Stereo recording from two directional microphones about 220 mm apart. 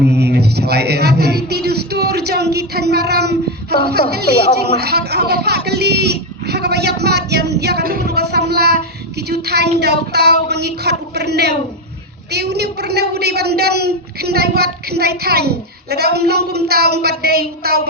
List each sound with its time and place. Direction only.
0.0 s a woman's voice: 50° right (ahead or behind)
9.1 s a sound: 50° right (ahead or behind)
9.8 s a woman's voice: 50° right (ahead or behind)